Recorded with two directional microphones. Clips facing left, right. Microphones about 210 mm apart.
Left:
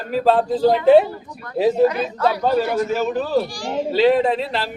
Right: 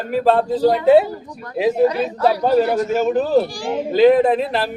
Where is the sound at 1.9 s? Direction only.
35° right (ahead or behind).